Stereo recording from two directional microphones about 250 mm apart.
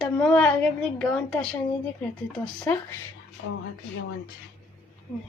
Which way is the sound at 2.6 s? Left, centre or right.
Centre.